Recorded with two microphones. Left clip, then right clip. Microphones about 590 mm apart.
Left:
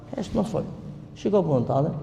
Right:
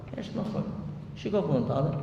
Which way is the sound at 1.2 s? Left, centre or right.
Left.